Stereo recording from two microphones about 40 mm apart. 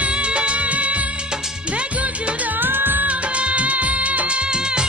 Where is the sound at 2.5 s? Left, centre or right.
Right.